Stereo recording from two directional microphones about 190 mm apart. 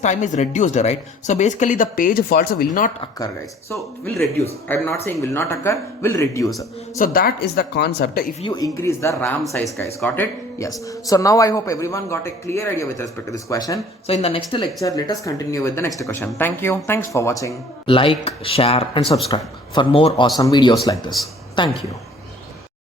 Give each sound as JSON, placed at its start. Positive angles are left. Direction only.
{"t": 0.0, "sound": "speech", "side_deg": 40}
{"t": 4.7, "sound": "speech", "side_deg": 10}
{"t": 6.9, "sound": "speech", "side_deg": 50}
{"t": 8.4, "sound": "speech", "side_deg": 20}
{"t": 14.1, "sound": "speech", "side_deg": 30}
{"t": 14.5, "sound": "speech", "side_deg": 20}